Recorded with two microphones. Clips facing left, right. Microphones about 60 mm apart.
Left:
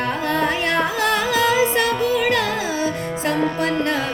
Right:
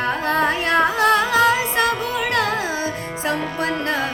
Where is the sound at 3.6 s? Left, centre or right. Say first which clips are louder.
Left 1 dB; right.